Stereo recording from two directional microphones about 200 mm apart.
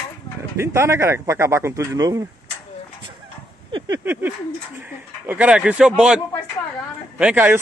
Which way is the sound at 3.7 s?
25° right (ahead or behind).